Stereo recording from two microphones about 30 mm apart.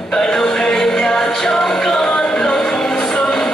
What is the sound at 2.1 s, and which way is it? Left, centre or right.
Music, left.